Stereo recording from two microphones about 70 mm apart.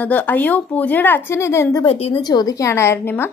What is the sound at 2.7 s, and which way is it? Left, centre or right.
Speech, left.